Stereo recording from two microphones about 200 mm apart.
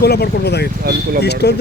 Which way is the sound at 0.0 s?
55° left (ahead or behind).